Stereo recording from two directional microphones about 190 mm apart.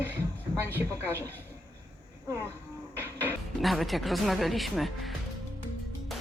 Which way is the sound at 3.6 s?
Centre (ahead or behind).